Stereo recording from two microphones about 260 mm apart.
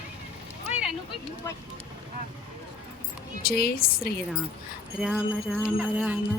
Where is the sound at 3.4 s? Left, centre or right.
Left.